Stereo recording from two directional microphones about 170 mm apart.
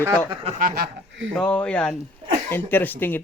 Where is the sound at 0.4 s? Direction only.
45° right (ahead or behind).